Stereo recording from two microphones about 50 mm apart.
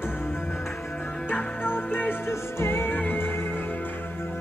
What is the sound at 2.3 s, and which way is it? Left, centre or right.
Music, left.